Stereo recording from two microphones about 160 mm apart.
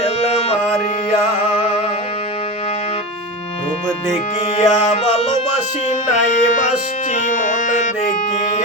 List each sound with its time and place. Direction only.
0.0 s music: 40° left (ahead or behind)
4.5 s music: 40° left (ahead or behind)